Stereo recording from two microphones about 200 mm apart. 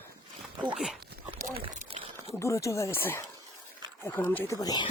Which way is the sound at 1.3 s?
40° right (ahead or behind).